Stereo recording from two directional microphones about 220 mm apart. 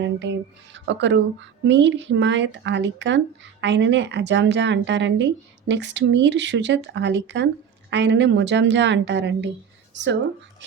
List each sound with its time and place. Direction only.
0.0 s speech: 55° right (ahead or behind)